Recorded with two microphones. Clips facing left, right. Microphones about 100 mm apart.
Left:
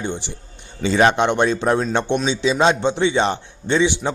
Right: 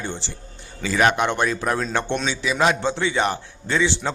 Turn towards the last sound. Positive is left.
turn(degrees=20)  # may be behind; listen again after turning